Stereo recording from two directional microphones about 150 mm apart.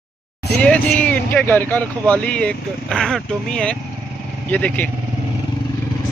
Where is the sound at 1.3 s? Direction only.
10° left (ahead or behind).